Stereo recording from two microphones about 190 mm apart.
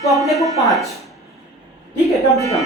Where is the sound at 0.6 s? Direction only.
Centre (ahead or behind).